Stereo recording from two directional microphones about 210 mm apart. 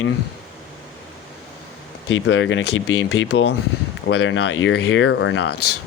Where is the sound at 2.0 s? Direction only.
60° left (ahead or behind).